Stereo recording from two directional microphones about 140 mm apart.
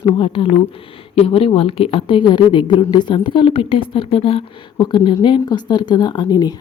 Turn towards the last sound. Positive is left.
turn(degrees=30)  # may be behind; listen again after turning